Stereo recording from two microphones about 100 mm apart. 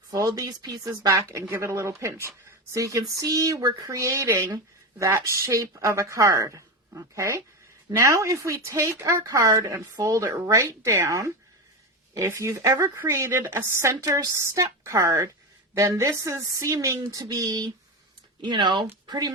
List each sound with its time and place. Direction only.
0.1 s a woman's voice: 40° right (ahead or behind)